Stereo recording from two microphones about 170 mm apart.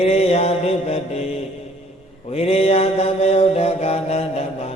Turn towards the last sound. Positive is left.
turn(degrees=40)  # may be behind; listen again after turning